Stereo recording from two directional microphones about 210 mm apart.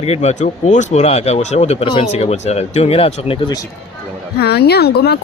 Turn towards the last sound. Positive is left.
turn(degrees=50)  # may be behind; listen again after turning